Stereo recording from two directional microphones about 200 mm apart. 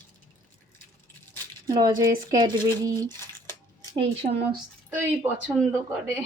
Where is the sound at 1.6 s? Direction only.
20° right (ahead or behind).